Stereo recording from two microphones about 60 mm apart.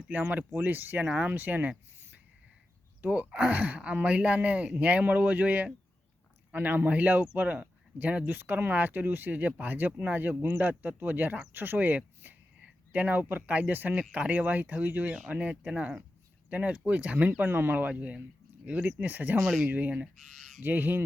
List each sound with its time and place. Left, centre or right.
0.1 s speech: right
3.1 s speech: centre
3.5 s speech: right
19.4 s speech: centre
19.7 s speech: right